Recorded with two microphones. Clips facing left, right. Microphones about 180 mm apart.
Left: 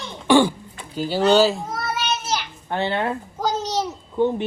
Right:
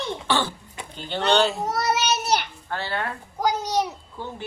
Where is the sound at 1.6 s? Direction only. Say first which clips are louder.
Right 3 dB; 75° right (ahead or behind).